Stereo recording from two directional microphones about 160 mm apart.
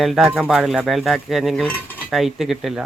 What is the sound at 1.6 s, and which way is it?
Cutlery, 10° left (ahead or behind).